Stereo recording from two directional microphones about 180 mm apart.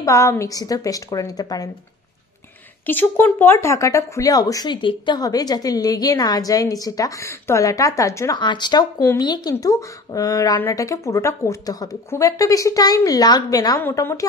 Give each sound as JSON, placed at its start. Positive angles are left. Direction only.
{"t": 0.0, "sound": "speech", "side_deg": 15}
{"t": 2.9, "sound": "speech", "side_deg": 10}